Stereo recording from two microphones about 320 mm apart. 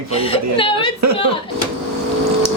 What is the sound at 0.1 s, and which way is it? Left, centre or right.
Speech, centre.